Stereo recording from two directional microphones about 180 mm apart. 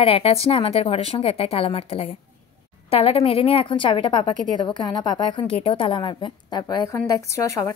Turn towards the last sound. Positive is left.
turn(degrees=15)  # may be behind; listen again after turning